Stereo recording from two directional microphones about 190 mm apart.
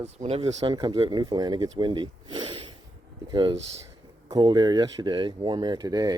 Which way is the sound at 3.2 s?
25° right (ahead or behind).